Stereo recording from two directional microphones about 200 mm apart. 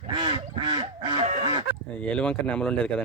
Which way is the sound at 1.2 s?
35° right (ahead or behind).